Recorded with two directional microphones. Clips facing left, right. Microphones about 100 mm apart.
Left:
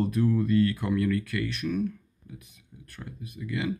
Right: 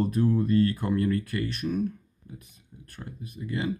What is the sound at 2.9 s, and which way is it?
Speech, 40° right (ahead or behind).